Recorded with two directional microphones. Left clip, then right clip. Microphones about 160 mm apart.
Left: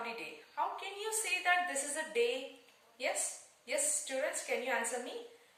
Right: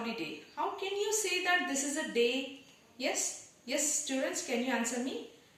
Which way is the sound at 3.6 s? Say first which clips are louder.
Right 3 dB; centre (ahead or behind).